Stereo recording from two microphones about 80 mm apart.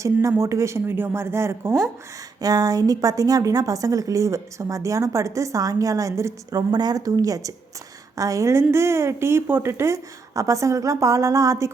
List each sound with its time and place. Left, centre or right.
0.0 s a woman's voice: right
2.4 s a woman's voice: right
6.6 s a woman's voice: right